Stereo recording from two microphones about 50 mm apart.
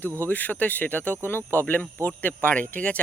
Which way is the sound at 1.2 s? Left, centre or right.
Left.